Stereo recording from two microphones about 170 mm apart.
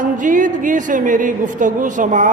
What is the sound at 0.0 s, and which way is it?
A woman's voice, 50° right (ahead or behind).